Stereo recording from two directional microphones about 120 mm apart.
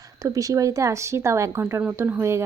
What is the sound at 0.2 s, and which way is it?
Speech, 30° right (ahead or behind).